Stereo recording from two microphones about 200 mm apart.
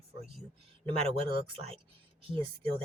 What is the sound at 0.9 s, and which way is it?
Speech, 30° right (ahead or behind).